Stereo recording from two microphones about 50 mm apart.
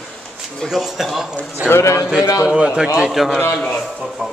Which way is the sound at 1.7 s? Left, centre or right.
Left.